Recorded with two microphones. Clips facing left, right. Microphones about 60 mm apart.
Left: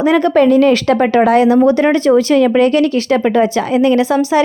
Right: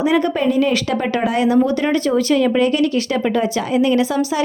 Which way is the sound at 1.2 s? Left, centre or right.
Left.